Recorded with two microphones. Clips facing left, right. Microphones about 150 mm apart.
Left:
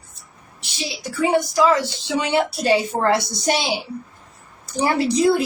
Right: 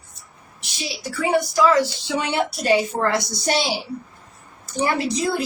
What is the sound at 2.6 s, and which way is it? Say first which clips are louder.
Speech: even; 30° left (ahead or behind).